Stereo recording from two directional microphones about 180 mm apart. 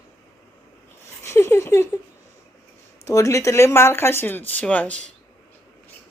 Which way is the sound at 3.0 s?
15° left (ahead or behind).